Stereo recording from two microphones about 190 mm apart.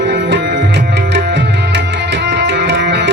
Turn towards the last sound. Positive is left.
turn(degrees=-65)  # may be behind; listen again after turning